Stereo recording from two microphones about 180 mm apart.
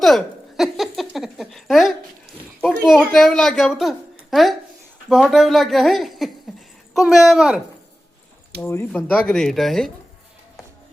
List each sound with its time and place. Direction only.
0.0 s a sound: centre (ahead or behind)
2.8 s a woman's voice: centre (ahead or behind)
8.6 s a woman's voice: 10° left (ahead or behind)